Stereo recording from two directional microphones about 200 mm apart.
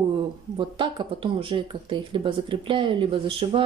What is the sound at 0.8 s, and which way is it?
Speech, 25° right (ahead or behind).